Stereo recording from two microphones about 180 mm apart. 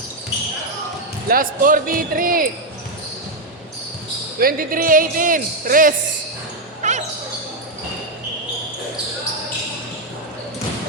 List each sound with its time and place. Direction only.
1.3 s speech: 50° right (ahead or behind)
4.4 s speech: 55° right (ahead or behind)
6.8 s basketball bounce: 40° right (ahead or behind)